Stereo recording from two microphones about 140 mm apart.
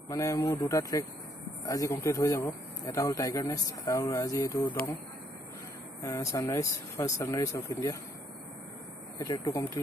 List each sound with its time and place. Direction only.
0.1 s speech: 25° left (ahead or behind)
6.0 s speech: 25° left (ahead or behind)
9.2 s speech: 25° left (ahead or behind)